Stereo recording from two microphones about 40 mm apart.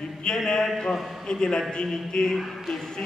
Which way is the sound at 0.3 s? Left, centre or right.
Left.